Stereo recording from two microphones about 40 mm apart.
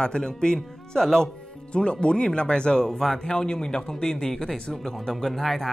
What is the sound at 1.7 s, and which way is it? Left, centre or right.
Speech, left.